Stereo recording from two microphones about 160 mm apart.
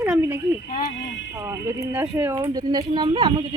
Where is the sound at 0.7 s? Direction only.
55° left (ahead or behind).